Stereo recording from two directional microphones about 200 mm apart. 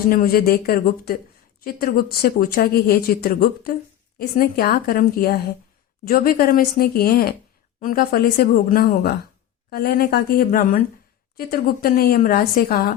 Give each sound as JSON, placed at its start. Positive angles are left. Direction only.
{"t": 0.1, "sound": "speech", "side_deg": 45}